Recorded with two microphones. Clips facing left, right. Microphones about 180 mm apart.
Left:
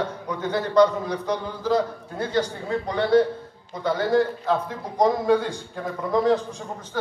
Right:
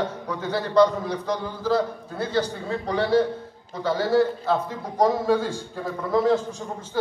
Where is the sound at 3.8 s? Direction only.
10° right (ahead or behind).